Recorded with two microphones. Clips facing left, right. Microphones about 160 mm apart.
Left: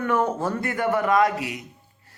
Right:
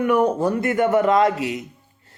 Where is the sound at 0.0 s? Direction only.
15° right (ahead or behind).